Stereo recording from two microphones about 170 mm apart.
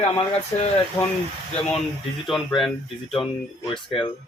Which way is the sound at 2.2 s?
Centre (ahead or behind).